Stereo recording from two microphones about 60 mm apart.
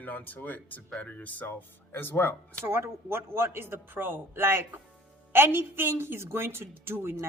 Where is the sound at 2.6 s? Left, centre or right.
Right.